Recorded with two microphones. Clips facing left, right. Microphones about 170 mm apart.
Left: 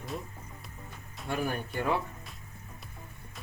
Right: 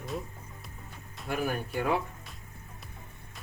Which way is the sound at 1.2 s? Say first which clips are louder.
Right 1 dB; 5° right (ahead or behind).